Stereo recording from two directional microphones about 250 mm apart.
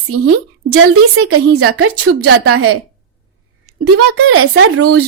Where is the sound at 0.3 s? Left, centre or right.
Right.